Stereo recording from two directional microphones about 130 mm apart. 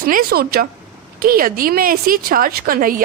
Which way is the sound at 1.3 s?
90° right.